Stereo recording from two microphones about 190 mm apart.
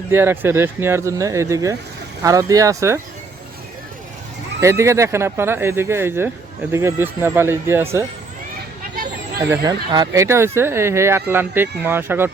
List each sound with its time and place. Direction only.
0.1 s speech: 10° right (ahead or behind)
4.6 s speech: 15° right (ahead or behind)
9.4 s speech: 15° right (ahead or behind)